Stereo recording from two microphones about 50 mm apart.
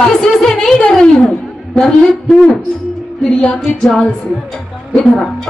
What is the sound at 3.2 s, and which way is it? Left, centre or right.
Speech, centre.